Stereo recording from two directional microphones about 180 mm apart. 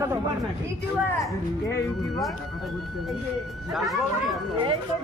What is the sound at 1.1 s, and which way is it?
Speech, 15° left (ahead or behind).